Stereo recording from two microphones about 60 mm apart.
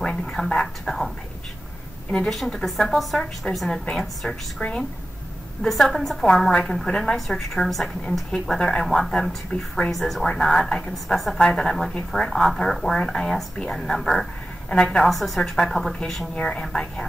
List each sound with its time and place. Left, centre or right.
0.0 s a sound: centre
0.5 s a woman's voice: centre
2.2 s speech: centre
4.6 s a woman's voice: centre
5.7 s a woman's voice: centre
9.5 s a woman's voice: left
9.8 s a woman's voice: centre